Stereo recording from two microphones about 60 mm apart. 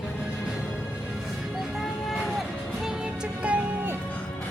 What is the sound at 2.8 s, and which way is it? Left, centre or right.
Music, centre.